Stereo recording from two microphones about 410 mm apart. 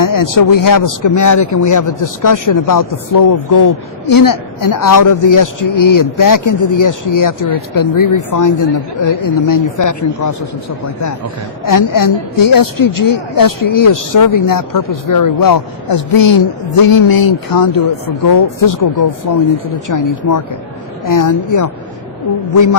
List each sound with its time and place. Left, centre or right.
0.0 s speech: left
11.6 s speech: left